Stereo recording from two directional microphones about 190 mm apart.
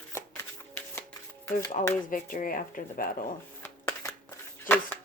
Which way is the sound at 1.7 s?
40° left (ahead or behind).